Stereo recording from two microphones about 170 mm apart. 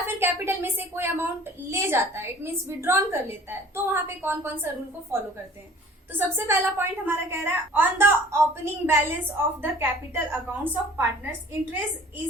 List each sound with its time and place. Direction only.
0.0 s a woman's voice: 15° right (ahead or behind)